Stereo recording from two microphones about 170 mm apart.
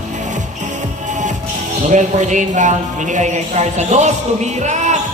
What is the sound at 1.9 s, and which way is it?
Speech, 45° right (ahead or behind).